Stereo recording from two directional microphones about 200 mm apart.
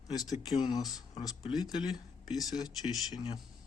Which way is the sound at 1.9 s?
Centre (ahead or behind).